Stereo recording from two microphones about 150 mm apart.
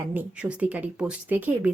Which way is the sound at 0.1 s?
10° right (ahead or behind).